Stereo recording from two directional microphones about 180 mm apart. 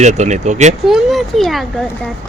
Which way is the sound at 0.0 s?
40° right (ahead or behind).